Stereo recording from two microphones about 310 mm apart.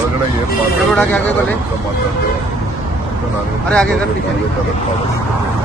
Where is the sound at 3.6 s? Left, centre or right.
Centre.